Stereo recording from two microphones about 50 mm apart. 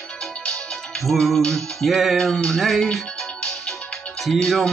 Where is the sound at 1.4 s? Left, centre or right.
Centre.